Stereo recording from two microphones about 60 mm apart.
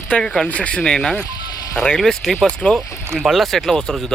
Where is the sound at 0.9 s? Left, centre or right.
Centre.